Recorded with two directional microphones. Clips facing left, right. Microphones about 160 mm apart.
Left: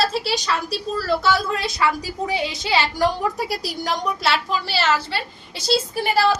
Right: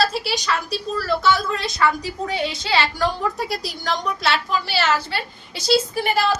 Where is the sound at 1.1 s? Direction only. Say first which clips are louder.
Even; 5° left (ahead or behind).